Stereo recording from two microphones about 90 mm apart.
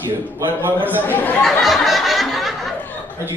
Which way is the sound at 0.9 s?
20° left (ahead or behind).